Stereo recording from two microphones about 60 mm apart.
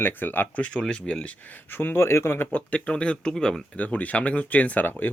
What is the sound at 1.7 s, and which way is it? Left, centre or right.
Speech, left.